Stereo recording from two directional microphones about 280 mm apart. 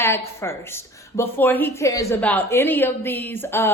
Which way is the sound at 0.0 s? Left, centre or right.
Centre.